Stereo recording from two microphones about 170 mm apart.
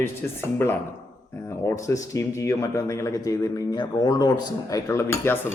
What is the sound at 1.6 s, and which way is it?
A man's voice, 20° left (ahead or behind).